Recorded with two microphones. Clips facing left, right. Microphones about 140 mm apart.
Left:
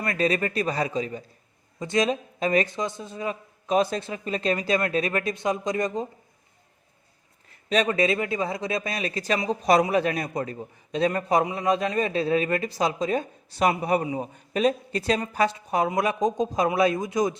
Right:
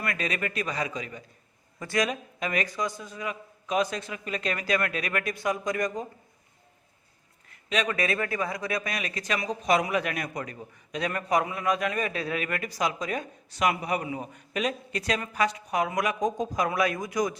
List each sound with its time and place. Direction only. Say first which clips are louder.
0.0 s a man's voice: left 6 dB; 30° left (ahead or behind)
7.7 s a man's voice: left 5 dB; 30° left (ahead or behind)